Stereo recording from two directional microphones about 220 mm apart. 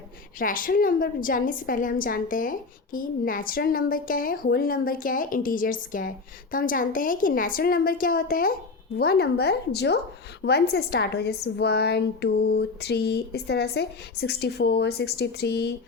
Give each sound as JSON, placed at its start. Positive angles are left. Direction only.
{"t": 0.3, "sound": "a woman's voice", "side_deg": 40}